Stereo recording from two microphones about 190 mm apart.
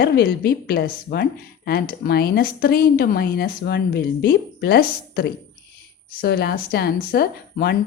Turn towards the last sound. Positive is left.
turn(degrees=55)  # may be behind; listen again after turning